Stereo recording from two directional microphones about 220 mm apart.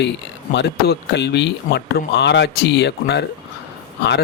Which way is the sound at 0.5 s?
50° left (ahead or behind).